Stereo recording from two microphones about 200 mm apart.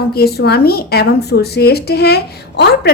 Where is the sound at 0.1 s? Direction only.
50° left (ahead or behind).